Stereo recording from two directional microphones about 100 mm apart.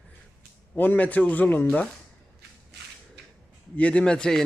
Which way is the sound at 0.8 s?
15° left (ahead or behind).